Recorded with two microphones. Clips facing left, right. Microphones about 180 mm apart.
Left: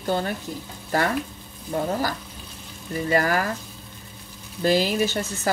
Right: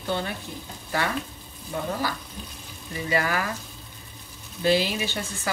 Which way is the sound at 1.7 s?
40° left (ahead or behind).